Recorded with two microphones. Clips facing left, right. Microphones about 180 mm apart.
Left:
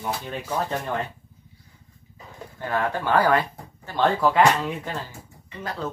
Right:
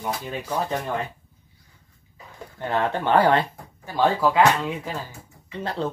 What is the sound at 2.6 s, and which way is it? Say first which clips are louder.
Speech: right 2 dB; 20° right (ahead or behind).